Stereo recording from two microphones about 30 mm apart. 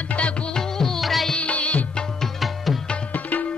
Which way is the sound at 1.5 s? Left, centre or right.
Left.